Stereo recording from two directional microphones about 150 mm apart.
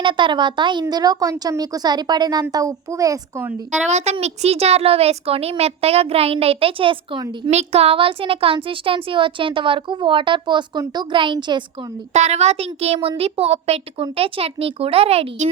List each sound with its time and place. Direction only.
0.0 s a woman's voice: 30° right (ahead or behind)
3.8 s a woman's voice: 45° right (ahead or behind)
7.5 s a woman's voice: 45° right (ahead or behind)
12.1 s a woman's voice: 50° right (ahead or behind)